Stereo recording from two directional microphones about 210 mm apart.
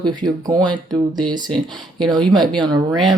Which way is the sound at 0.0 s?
20° right (ahead or behind).